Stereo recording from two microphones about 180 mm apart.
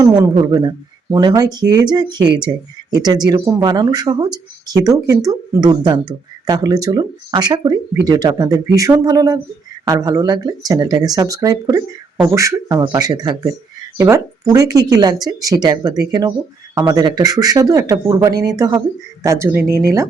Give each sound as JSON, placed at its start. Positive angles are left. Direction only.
{"t": 0.0, "sound": "speech", "side_deg": -20}